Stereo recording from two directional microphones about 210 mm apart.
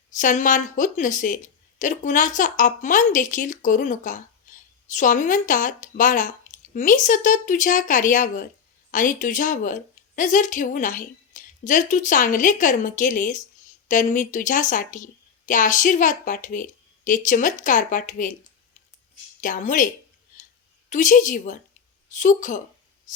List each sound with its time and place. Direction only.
0.2 s a woman's voice: 40° left (ahead or behind)
4.5 s a sound: 35° left (ahead or behind)
4.9 s a woman's voice: 35° left (ahead or behind)
19.4 s a woman's voice: 40° left (ahead or behind)
20.9 s a woman's voice: 35° left (ahead or behind)
23.1 s a sound: 35° left (ahead or behind)